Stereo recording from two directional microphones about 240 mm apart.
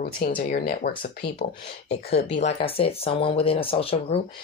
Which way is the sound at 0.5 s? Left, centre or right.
Left.